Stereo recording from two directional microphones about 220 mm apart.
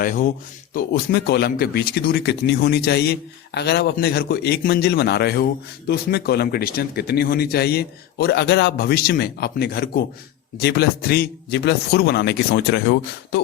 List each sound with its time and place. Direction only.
0.0 s speech: 35° left (ahead or behind)